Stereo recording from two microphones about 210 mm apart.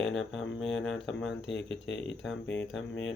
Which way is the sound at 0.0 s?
Centre (ahead or behind).